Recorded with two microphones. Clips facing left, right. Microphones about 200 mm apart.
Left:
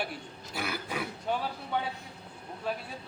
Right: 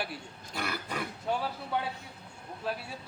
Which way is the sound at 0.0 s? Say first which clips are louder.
Left 1 dB; centre (ahead or behind).